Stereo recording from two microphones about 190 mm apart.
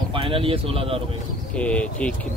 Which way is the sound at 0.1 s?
30° right (ahead or behind).